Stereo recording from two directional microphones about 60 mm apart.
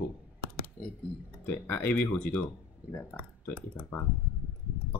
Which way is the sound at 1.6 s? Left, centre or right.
Left.